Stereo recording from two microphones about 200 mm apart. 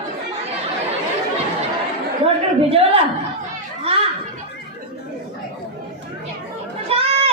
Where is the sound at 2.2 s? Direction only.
30° right (ahead or behind).